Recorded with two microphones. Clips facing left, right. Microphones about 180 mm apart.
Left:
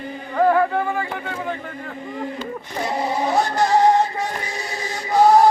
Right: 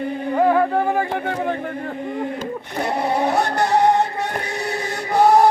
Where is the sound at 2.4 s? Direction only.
60° right (ahead or behind).